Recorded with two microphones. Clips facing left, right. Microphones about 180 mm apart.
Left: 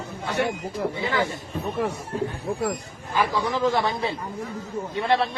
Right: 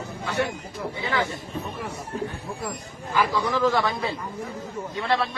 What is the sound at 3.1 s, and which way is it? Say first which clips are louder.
A man's voice: even; 20° left (ahead or behind).